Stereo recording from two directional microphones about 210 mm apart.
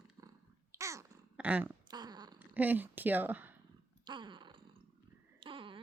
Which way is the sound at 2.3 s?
10° right (ahead or behind).